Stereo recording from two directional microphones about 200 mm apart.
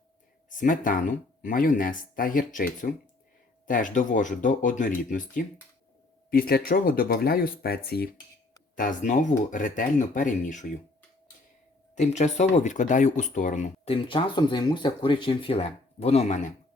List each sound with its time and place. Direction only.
0.6 s speech: 40° left (ahead or behind)
8.7 s speech: 40° left (ahead or behind)
11.9 s speech: 35° left (ahead or behind)